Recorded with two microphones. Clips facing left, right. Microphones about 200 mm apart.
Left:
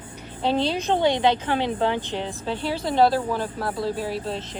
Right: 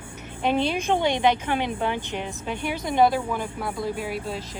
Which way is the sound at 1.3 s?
15° right (ahead or behind).